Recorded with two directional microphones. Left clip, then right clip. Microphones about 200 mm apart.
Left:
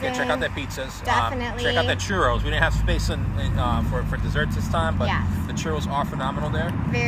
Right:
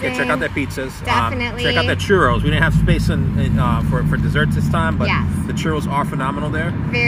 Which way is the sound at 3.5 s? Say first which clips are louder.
Right 4 dB; 25° right (ahead or behind).